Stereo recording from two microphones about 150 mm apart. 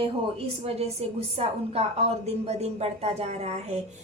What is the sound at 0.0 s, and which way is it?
A woman's voice, 40° right (ahead or behind).